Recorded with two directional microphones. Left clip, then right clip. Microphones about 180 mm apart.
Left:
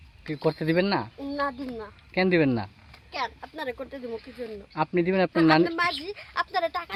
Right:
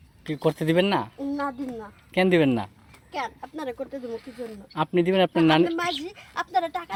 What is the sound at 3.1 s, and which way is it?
Speech, 15° left (ahead or behind).